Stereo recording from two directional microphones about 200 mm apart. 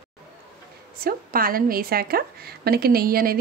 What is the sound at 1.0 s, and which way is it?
A woman's voice, 45° right (ahead or behind).